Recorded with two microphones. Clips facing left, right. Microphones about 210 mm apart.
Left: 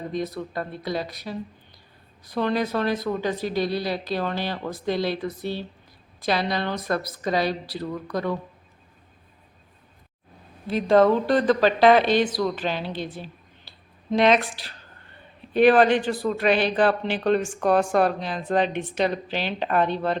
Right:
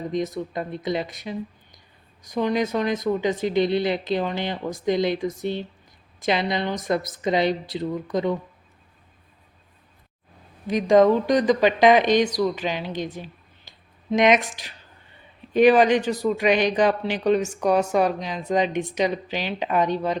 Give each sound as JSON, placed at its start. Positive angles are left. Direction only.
{"t": 0.3, "sound": "speech", "side_deg": -20}
{"t": 10.7, "sound": "a woman's voice", "side_deg": -15}
{"t": 14.1, "sound": "a woman's voice", "side_deg": -15}
{"t": 15.5, "sound": "a woman's voice", "side_deg": -10}
{"t": 18.7, "sound": "a woman's voice", "side_deg": -40}
{"t": 18.9, "sound": "a woman's voice", "side_deg": -10}